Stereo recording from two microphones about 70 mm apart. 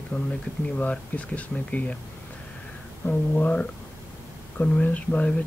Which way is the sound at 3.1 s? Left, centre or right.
Left.